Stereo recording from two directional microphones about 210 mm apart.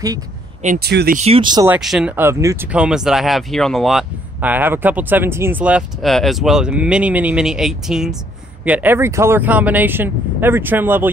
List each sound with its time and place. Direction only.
0.7 s speech: 50° right (ahead or behind)
1.2 s speech: 25° right (ahead or behind)
1.7 s speech: centre (ahead or behind)